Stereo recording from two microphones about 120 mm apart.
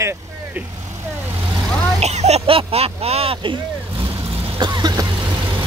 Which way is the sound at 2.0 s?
65° right (ahead or behind).